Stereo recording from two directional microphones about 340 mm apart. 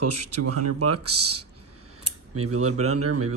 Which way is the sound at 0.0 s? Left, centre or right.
Right.